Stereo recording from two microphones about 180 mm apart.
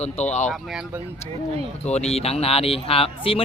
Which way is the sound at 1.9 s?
35° left (ahead or behind).